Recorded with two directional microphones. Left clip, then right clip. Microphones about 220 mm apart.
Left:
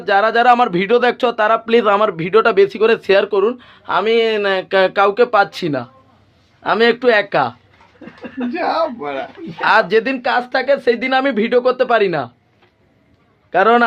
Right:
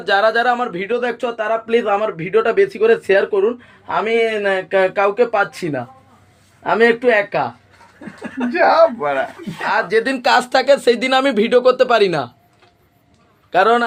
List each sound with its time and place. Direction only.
0.0 s speech: 25° left (ahead or behind)
7.3 s speech: 35° left (ahead or behind)
8.4 s speech: 20° right (ahead or behind)
9.6 s speech: 40° left (ahead or behind)
10.2 s speech: 15° right (ahead or behind)
13.5 s a man's voice: 25° left (ahead or behind)